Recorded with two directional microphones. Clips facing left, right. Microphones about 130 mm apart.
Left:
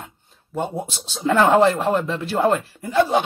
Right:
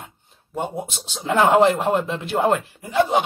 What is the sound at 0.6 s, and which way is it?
Speech, 15° right (ahead or behind).